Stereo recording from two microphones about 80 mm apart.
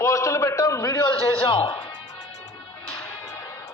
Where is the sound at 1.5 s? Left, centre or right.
Left.